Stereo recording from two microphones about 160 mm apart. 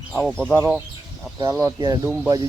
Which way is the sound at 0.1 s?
Centre (ahead or behind).